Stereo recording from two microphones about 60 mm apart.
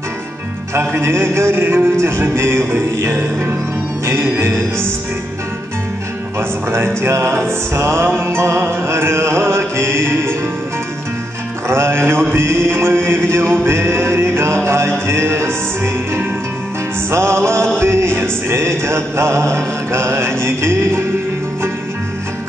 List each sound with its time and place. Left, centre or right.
1.0 s music: right
4.4 s music: right
7.0 s music: right
11.6 s music: right